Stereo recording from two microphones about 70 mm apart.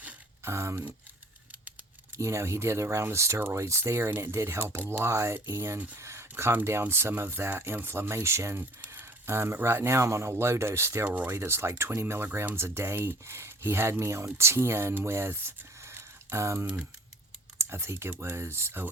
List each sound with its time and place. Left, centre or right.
0.4 s speech: right
2.1 s speech: right
9.0 s a sound: right
9.6 s speech: right
11.0 s speech: right
11.3 s speech: right